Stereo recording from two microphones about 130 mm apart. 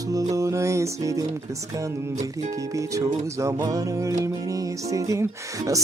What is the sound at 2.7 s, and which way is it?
Music, 25° right (ahead or behind).